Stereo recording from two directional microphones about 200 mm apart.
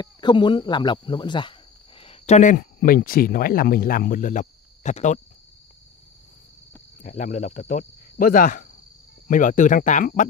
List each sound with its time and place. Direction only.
0.0 s speech: 20° left (ahead or behind)
7.0 s speech: 35° left (ahead or behind)